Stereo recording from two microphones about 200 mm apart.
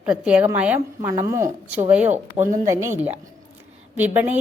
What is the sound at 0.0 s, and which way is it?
A woman's voice, 5° right (ahead or behind).